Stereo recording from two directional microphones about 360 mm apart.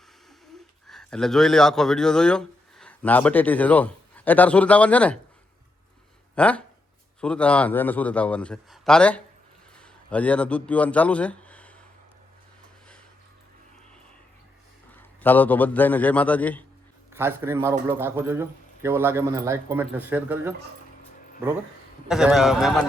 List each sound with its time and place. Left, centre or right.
0.9 s speech: centre
6.3 s a man's voice: centre
14.9 s a man's voice: centre
17.1 s a man's voice: centre
22.1 s a man's voice: centre